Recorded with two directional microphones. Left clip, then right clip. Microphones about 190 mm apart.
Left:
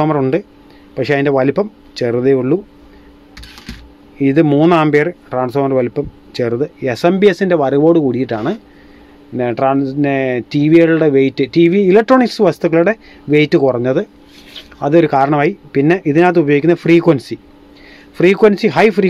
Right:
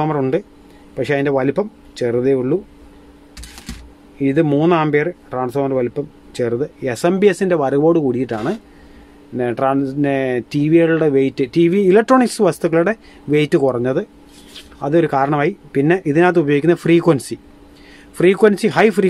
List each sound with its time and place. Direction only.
0.0 s speech: 20° left (ahead or behind)
4.2 s speech: 25° left (ahead or behind)
9.4 s speech: 15° left (ahead or behind)
14.5 s speech: 25° left (ahead or behind); by 19.0 s 10° left (ahead or behind)